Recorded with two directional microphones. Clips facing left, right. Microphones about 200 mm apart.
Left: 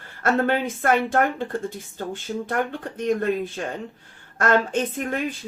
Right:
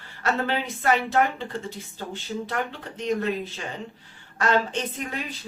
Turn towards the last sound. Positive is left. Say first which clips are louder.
# left 6 dB
turn(degrees=50)  # may be behind; listen again after turning